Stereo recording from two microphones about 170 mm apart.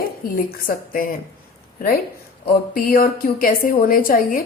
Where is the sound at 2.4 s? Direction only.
55° left (ahead or behind).